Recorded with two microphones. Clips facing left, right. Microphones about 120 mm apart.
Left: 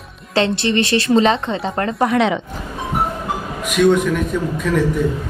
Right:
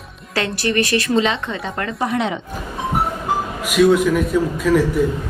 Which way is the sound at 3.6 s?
5° right (ahead or behind).